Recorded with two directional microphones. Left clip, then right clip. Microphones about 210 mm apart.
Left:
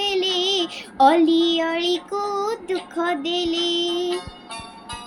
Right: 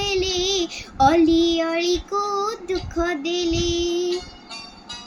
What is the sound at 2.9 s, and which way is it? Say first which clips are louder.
Music: left 1 dB; 15° right (ahead or behind).